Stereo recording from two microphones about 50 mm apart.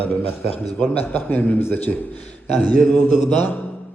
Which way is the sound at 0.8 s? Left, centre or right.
Left.